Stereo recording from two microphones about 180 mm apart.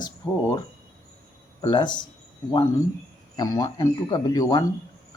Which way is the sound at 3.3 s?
20° left (ahead or behind).